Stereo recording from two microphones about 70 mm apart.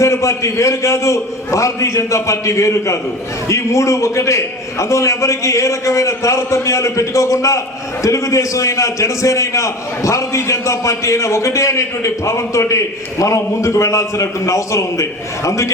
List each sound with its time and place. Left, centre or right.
0.0 s a man's voice: left